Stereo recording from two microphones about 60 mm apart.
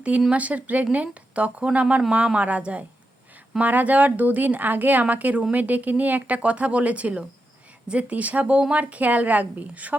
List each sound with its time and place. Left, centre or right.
0.3 s speech: right